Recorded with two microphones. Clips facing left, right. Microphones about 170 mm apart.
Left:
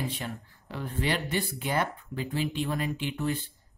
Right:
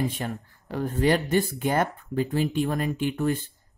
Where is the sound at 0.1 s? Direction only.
45° right (ahead or behind).